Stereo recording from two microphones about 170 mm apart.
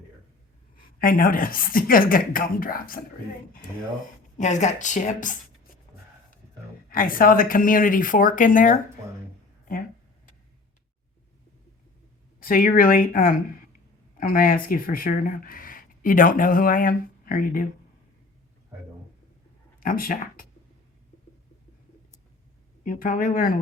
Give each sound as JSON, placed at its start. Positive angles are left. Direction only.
{"t": 0.8, "sound": "a woman's voice", "side_deg": 55}
{"t": 4.4, "sound": "speech", "side_deg": 45}
{"t": 6.9, "sound": "speech", "side_deg": 55}
{"t": 12.4, "sound": "a woman's voice", "side_deg": 55}
{"t": 19.8, "sound": "speech", "side_deg": 55}
{"t": 22.8, "sound": "a woman's voice", "side_deg": 55}